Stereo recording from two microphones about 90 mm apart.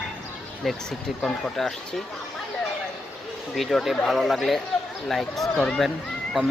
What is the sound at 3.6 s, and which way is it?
Speech, centre (ahead or behind).